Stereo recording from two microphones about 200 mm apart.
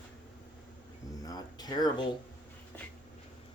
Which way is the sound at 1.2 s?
20° left (ahead or behind).